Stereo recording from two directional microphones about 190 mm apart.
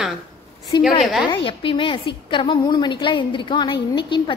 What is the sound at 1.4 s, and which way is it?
A woman's voice, 25° left (ahead or behind).